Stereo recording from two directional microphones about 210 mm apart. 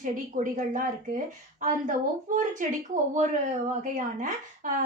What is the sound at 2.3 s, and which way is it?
A woman's voice, 40° right (ahead or behind).